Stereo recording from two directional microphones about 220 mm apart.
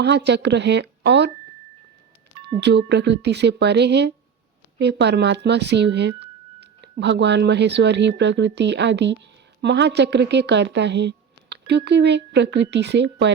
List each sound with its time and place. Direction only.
0.0 s speech: 50° right (ahead or behind)
2.6 s a woman's voice: 50° right (ahead or behind)